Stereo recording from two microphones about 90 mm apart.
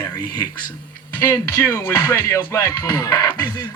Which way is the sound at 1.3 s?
30° left (ahead or behind).